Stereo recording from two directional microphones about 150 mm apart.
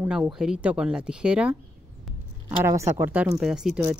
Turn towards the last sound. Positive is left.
turn(degrees=-5)  # may be behind; listen again after turning